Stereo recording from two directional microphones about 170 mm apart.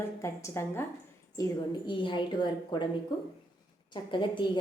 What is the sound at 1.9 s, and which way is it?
Speech, 30° left (ahead or behind).